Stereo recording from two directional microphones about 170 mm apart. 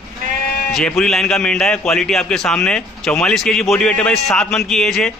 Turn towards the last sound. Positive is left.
turn(degrees=5)  # may be behind; listen again after turning